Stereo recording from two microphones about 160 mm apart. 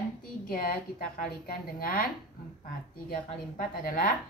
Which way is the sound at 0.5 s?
65° left (ahead or behind).